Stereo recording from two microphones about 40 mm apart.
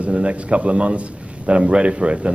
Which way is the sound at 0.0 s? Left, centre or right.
Right.